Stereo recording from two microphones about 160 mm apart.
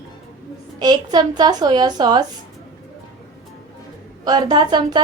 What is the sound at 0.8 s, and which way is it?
A woman's voice, 25° right (ahead or behind).